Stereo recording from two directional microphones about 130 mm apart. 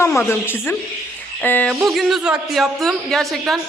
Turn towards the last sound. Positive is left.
turn(degrees=0)  # may be behind; listen again after turning